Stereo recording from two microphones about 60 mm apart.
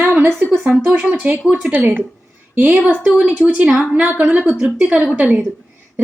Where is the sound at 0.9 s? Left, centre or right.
Right.